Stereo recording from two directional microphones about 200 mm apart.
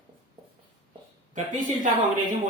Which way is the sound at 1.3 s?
40° right (ahead or behind).